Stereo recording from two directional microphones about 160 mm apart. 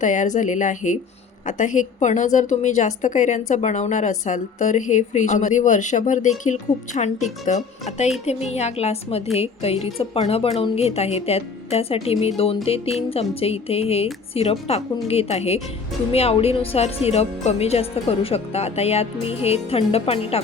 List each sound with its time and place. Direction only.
0.0 s a woman's voice: 50° left (ahead or behind)